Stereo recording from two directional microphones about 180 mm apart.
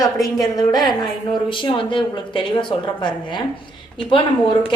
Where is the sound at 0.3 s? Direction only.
25° left (ahead or behind).